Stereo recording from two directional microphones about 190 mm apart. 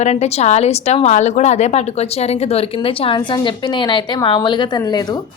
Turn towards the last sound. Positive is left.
turn(degrees=20)  # may be behind; listen again after turning